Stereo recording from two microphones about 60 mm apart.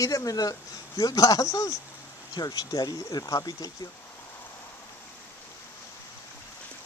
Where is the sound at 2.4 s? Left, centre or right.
Left.